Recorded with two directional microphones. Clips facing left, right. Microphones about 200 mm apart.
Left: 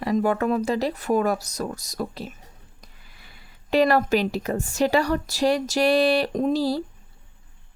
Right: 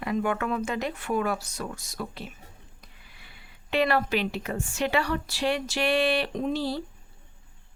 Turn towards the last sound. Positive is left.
turn(degrees=40)  # may be behind; listen again after turning